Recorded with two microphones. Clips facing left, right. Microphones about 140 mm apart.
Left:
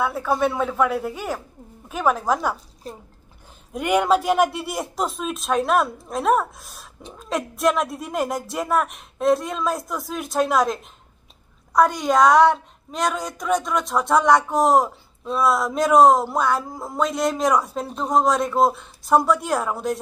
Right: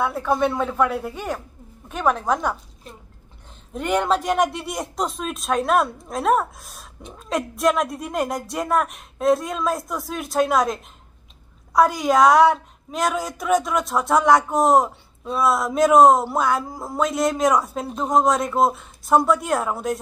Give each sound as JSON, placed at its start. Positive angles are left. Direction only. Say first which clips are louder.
{"t": 0.0, "sound": "a woman's voice", "louder": "even", "side_deg": 0}
{"t": 2.5, "sound": "speech", "louder": "left 2 dB", "side_deg": 35}
{"t": 3.7, "sound": "a woman's voice", "louder": "left 2 dB", "side_deg": 10}